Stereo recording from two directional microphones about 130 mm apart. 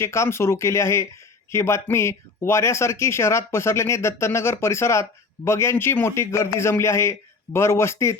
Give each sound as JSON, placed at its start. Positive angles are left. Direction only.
{"t": 0.0, "sound": "speech", "side_deg": 20}